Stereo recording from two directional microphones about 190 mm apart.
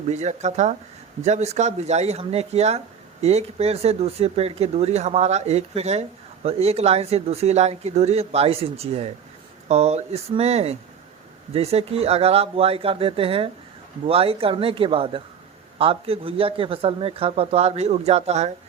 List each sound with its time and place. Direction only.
0.1 s speech: 35° right (ahead or behind)